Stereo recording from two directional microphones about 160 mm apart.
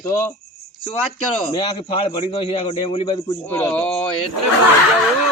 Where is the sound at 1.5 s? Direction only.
35° left (ahead or behind).